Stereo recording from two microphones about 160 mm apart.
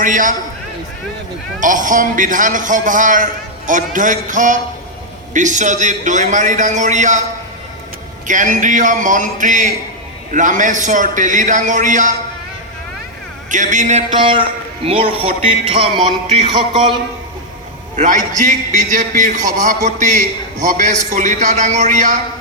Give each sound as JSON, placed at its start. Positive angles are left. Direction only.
{"t": 0.0, "sound": "a man's voice", "side_deg": -55}
{"t": 1.5, "sound": "a man's voice", "side_deg": -55}
{"t": 8.3, "sound": "a man's voice", "side_deg": -50}
{"t": 13.5, "sound": "a man's voice", "side_deg": -50}
{"t": 14.2, "sound": "a man's voice", "side_deg": -30}
{"t": 17.9, "sound": "a man's voice", "side_deg": -50}